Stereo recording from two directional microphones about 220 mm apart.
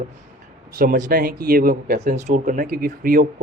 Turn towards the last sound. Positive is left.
turn(degrees=-40)  # may be behind; listen again after turning